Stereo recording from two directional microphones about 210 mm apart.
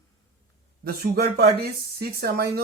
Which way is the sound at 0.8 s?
50° right (ahead or behind).